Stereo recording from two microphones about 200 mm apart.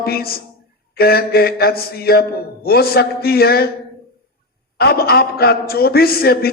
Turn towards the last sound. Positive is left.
turn(degrees=50)  # may be behind; listen again after turning